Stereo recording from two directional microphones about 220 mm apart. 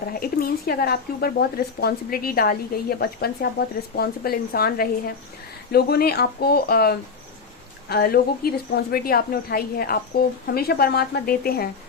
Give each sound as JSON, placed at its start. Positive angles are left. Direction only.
{"t": 0.1, "sound": "a woman's voice", "side_deg": 40}